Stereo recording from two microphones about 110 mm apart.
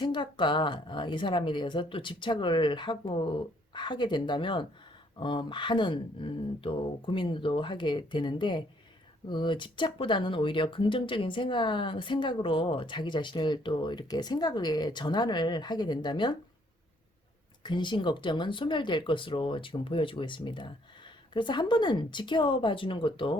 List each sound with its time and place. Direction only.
0.0 s speech: 45° left (ahead or behind)
17.6 s speech: 45° left (ahead or behind)